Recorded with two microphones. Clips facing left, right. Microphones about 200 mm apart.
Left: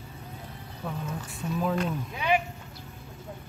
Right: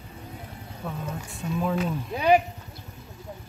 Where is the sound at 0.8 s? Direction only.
5° right (ahead or behind).